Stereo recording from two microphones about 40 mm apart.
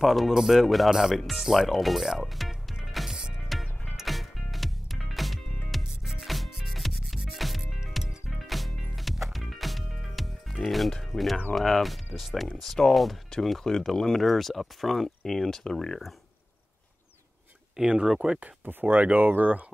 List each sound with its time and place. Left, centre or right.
0.0 s speech: centre
1.8 s music: centre
6.2 s rub: centre
7.3 s music: centre
11.5 s speech: centre
17.8 s speech: right
18.7 s speech: right